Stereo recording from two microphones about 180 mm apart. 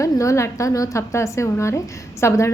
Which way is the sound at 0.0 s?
15° left (ahead or behind).